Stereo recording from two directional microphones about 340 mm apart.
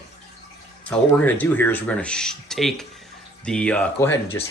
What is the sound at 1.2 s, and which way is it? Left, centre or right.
Speech, centre.